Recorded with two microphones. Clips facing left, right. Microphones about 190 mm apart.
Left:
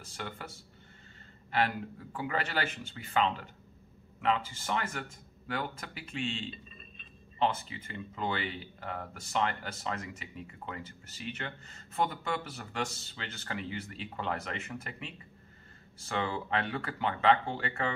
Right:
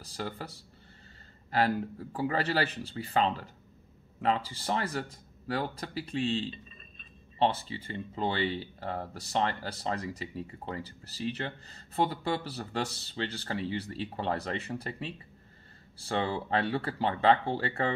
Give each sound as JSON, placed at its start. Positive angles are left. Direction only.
{"t": 0.0, "sound": "speech", "side_deg": -35}
{"t": 2.1, "sound": "speech", "side_deg": -35}